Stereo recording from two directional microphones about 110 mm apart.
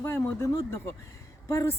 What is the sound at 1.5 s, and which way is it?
Speech, 25° left (ahead or behind).